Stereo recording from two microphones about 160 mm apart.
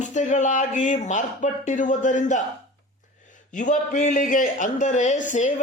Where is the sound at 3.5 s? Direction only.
50° left (ahead or behind).